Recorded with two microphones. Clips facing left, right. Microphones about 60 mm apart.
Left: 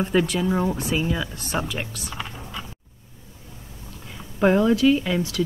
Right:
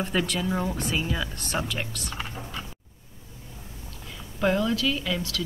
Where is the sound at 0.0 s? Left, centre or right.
Centre.